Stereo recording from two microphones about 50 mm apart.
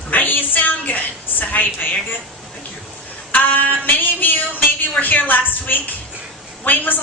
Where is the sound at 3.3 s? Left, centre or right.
Left.